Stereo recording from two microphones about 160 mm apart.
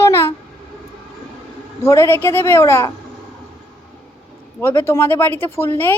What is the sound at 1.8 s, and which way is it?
A woman's voice, 15° left (ahead or behind).